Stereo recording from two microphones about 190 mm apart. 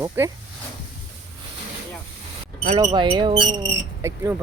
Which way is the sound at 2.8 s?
25° right (ahead or behind).